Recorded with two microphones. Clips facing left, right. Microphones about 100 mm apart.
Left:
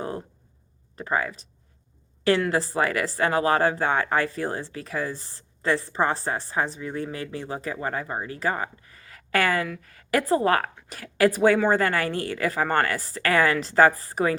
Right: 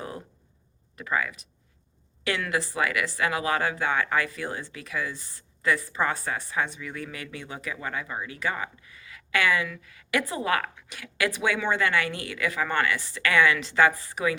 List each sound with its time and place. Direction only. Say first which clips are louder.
0.9 s speech: left 2 dB; 35° left (ahead or behind)